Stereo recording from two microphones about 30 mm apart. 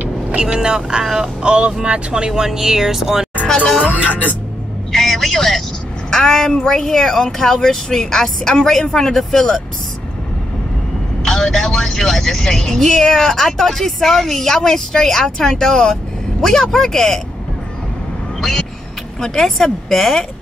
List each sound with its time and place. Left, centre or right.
0.4 s speech: right
1.0 s speech: centre
1.4 s speech: right
2.4 s speech: centre
3.8 s speech: right
4.9 s vehicle: centre
6.0 s speech: centre
11.2 s speech: centre
19.1 s speech: centre